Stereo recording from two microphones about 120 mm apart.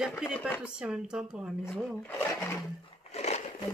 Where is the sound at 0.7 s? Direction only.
5° right (ahead or behind).